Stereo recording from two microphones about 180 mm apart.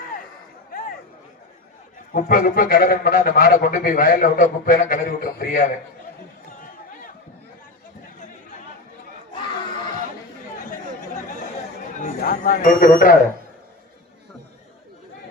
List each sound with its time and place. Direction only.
2.1 s a man's voice: 45° left (ahead or behind)
12.2 s a man's voice: 55° left (ahead or behind)